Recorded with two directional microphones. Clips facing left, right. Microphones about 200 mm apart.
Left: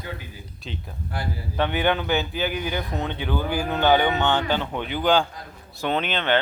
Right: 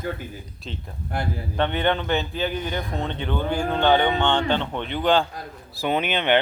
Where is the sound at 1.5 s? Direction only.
5° left (ahead or behind).